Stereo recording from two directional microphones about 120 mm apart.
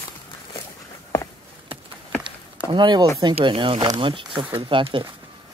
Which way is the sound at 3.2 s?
45° right (ahead or behind).